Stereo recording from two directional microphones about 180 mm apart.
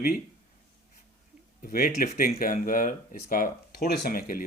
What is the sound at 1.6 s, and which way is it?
Speech, 50° left (ahead or behind).